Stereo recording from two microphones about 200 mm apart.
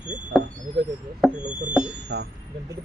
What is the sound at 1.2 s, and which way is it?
Music, centre (ahead or behind).